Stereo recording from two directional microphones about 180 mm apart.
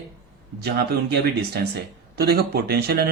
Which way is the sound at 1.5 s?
65° right (ahead or behind).